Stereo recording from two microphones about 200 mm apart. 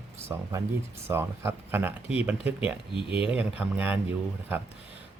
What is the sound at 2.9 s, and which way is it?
Speech, 25° left (ahead or behind).